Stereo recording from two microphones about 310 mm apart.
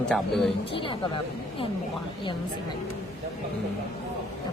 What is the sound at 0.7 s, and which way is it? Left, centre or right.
Speech, centre.